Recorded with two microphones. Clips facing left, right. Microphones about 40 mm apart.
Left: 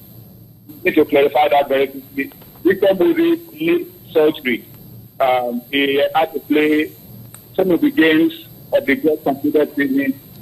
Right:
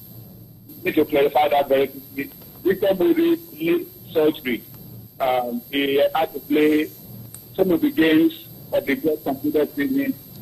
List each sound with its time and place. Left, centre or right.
0.8 s a man's voice: left